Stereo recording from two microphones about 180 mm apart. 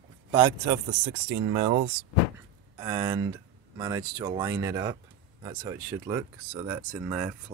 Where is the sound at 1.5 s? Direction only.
25° right (ahead or behind).